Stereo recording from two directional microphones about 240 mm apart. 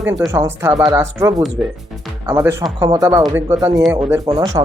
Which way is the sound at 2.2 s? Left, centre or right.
Centre.